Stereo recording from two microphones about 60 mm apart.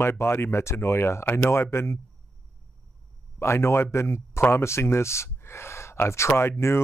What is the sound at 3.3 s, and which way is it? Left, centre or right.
Speech, left.